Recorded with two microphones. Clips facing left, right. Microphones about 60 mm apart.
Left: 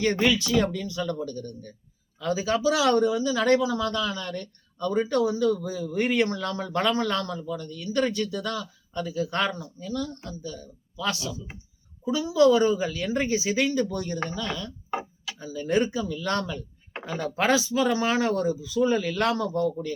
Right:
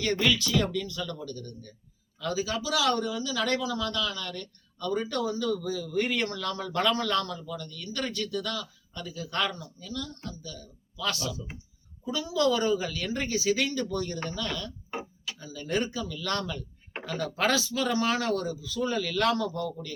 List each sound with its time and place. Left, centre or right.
0.0 s speech: left